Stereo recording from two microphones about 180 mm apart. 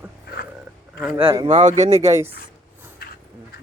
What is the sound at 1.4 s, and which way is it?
Speech, 40° right (ahead or behind).